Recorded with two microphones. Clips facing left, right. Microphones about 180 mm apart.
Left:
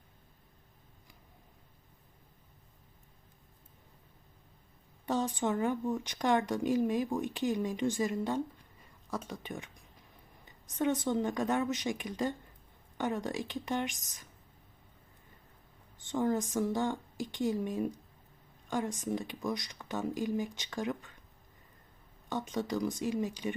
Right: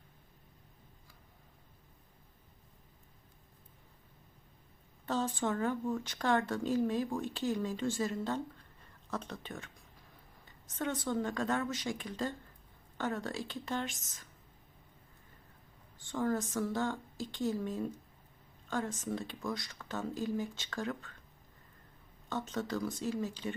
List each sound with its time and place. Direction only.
5.0 s speech: 15° left (ahead or behind)
16.0 s speech: 20° left (ahead or behind)
22.3 s speech: 15° left (ahead or behind)